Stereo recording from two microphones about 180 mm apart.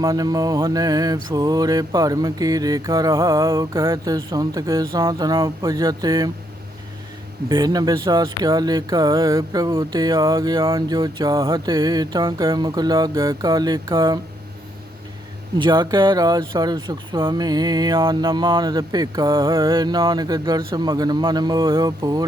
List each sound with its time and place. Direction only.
0.0 s speech: 20° right (ahead or behind)
7.4 s speech: 20° right (ahead or behind)
15.5 s speech: 25° right (ahead or behind)